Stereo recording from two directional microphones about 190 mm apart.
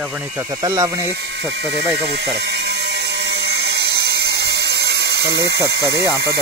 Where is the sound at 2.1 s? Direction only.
60° right (ahead or behind).